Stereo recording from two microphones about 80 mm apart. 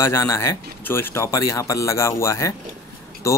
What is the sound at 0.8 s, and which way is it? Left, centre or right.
Speech, left.